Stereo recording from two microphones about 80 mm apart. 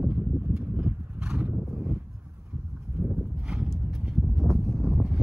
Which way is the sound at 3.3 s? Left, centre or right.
Centre.